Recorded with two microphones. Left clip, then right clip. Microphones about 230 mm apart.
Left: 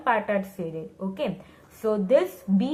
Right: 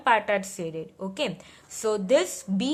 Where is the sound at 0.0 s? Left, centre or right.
Right.